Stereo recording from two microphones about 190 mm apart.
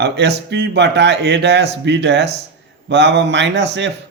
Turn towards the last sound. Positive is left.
turn(degrees=-70)  # may be behind; listen again after turning